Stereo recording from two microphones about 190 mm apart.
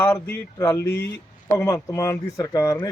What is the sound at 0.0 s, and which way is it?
Speech, 10° left (ahead or behind).